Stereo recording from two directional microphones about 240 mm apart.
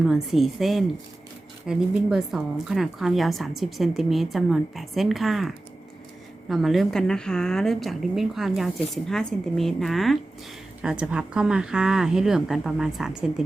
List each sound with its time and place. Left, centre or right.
0.0 s a woman's voice: centre